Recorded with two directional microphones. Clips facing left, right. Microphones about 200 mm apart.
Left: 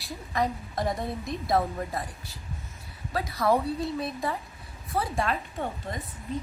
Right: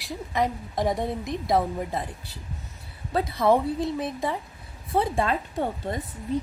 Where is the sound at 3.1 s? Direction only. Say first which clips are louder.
Right 4 dB; 25° right (ahead or behind).